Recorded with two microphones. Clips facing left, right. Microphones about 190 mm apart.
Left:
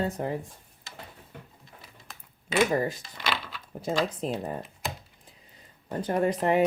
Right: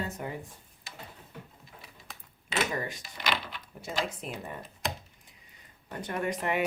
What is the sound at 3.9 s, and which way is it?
Speech, 35° left (ahead or behind).